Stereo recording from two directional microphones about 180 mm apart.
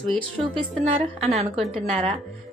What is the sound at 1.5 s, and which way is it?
Speech, centre (ahead or behind).